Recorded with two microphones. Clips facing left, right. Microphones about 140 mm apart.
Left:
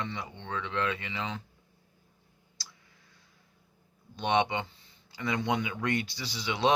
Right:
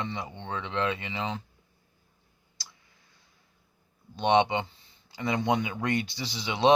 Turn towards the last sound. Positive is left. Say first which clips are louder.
# right 3 dB
turn(degrees=-20)  # may be behind; listen again after turning